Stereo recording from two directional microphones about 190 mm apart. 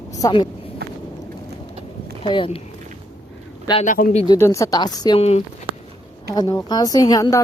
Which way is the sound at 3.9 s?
50° left (ahead or behind).